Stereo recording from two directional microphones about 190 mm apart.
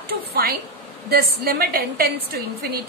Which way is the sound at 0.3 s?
55° right (ahead or behind).